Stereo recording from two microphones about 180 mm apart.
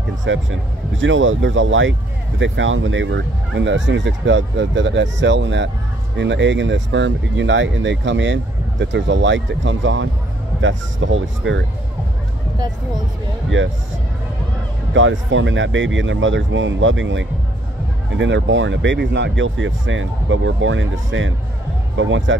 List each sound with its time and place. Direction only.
0.2 s speech: 90° right
15.0 s speech: 90° right